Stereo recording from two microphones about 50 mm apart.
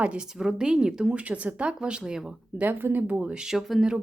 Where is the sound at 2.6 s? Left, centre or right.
Right.